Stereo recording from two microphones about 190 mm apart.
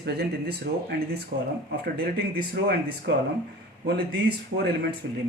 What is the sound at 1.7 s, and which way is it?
Speech, 55° right (ahead or behind).